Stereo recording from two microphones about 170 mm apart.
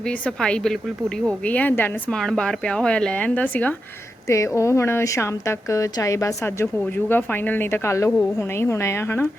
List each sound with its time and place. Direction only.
0.0 s speech: 5° left (ahead or behind)